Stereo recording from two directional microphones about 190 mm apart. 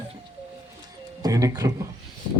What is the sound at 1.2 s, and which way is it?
Speech, 20° right (ahead or behind).